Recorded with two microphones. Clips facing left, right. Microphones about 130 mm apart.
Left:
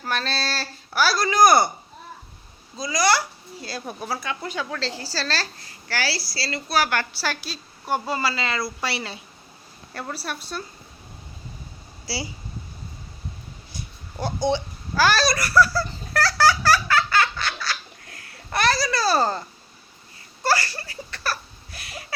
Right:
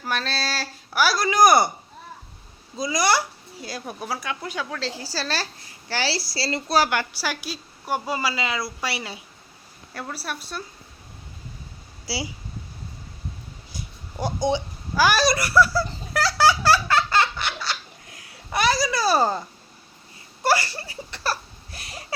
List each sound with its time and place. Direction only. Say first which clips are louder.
0.0 s a woman's voice: even; 5° right (ahead or behind)
2.7 s a woman's voice: even; 20° right (ahead or behind)
6.9 s a woman's voice: even; 15° right (ahead or behind)
14.2 s a sound: even; 15° right (ahead or behind)
18.9 s a woman's voice: right 1 dB; 15° right (ahead or behind)
20.4 s speech: right 1 dB; 20° right (ahead or behind)
21.7 s a sound: left 1 dB; 35° right (ahead or behind)